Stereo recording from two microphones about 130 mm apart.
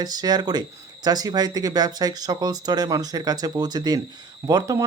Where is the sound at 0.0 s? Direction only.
30° right (ahead or behind).